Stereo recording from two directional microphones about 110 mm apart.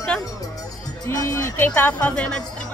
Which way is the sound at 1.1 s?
30° left (ahead or behind).